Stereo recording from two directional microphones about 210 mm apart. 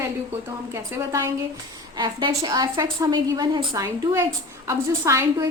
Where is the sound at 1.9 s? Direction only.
20° right (ahead or behind).